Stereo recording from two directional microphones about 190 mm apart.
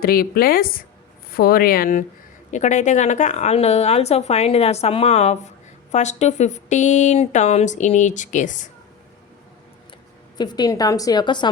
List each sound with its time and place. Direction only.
0.0 s a woman's voice: 50° left (ahead or behind)
10.3 s a woman's voice: 20° left (ahead or behind)